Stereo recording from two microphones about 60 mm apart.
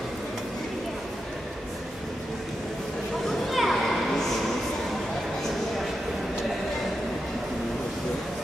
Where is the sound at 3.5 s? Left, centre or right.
Centre.